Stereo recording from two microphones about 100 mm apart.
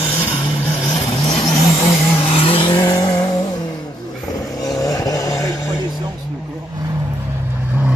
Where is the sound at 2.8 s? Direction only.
40° left (ahead or behind).